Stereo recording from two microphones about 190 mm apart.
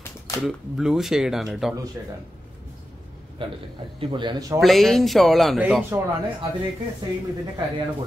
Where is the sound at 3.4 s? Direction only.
25° right (ahead or behind).